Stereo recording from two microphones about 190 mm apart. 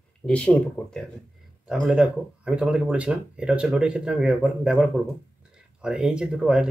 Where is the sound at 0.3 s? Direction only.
5° left (ahead or behind).